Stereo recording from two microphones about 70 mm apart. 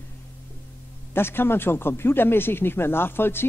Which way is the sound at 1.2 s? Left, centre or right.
Left.